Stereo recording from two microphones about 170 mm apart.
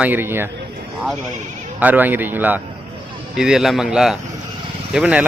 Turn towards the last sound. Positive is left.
turn(degrees=-5)  # may be behind; listen again after turning